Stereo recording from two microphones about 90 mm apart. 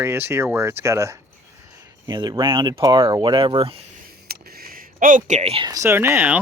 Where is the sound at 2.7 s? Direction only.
45° right (ahead or behind); by 3.8 s 80° right.